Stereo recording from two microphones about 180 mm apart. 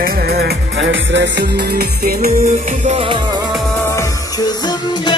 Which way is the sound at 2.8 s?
35° right (ahead or behind).